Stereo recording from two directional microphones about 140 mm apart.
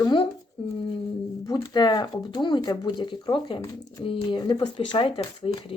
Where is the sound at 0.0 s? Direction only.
35° left (ahead or behind).